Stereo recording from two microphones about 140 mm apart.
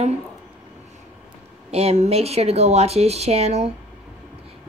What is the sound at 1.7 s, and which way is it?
A woman's voice, 45° right (ahead or behind).